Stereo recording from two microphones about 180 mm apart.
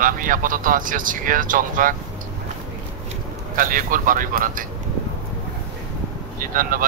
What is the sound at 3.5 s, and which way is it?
Speech, 50° right (ahead or behind).